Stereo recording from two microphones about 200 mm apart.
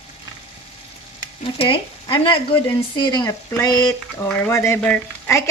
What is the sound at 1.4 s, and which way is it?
Speech, 25° left (ahead or behind).